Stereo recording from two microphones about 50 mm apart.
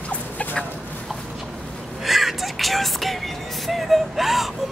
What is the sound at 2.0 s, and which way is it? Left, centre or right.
A woman's voice, centre.